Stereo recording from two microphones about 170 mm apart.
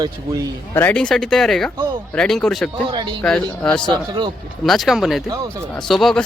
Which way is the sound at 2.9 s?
30° right (ahead or behind).